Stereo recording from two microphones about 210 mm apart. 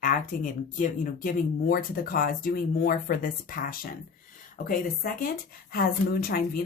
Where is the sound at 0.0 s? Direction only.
40° left (ahead or behind).